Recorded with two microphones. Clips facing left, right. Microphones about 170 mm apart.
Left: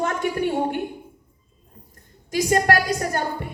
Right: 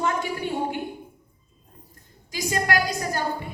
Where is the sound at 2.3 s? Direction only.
55° left (ahead or behind).